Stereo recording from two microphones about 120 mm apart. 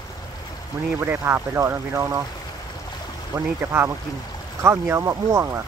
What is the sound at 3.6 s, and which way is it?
Speech, 20° right (ahead or behind).